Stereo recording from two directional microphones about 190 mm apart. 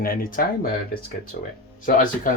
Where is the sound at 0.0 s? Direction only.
50° left (ahead or behind).